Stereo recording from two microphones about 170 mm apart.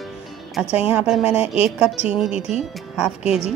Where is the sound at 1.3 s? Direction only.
35° left (ahead or behind).